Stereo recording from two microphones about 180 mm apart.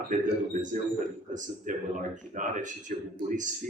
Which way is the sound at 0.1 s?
45° right (ahead or behind).